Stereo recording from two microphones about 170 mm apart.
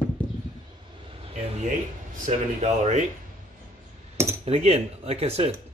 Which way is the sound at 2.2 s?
40° right (ahead or behind).